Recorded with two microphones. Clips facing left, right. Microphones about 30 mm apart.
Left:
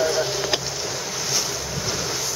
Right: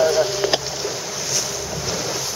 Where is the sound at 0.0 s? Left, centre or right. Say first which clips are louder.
Right 4 dB; centre.